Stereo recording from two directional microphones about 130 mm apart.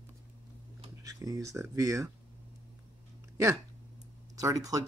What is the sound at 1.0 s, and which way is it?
Speech, 30° right (ahead or behind).